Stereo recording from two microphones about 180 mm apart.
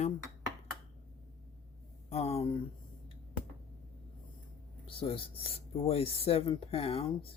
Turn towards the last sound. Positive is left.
turn(degrees=30)  # may be behind; listen again after turning